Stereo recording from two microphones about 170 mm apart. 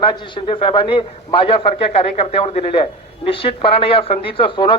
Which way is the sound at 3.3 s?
30° left (ahead or behind).